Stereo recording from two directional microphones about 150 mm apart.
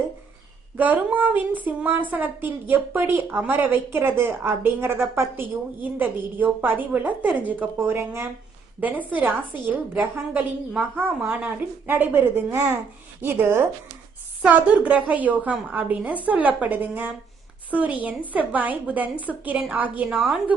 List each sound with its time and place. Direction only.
0.8 s speech: 10° right (ahead or behind)